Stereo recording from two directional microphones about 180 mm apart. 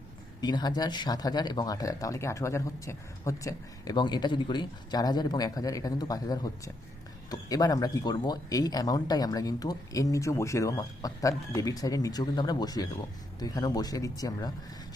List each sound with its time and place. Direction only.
0.4 s speech: 25° left (ahead or behind)